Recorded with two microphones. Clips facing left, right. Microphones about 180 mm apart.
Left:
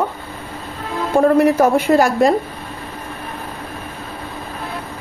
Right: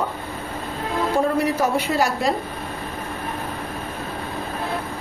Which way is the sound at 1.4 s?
50° left (ahead or behind).